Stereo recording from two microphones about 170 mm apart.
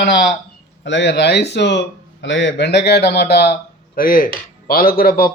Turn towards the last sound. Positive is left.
turn(degrees=60)  # may be behind; listen again after turning